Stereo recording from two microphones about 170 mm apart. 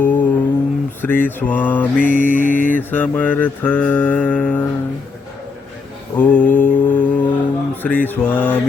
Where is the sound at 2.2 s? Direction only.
50° left (ahead or behind).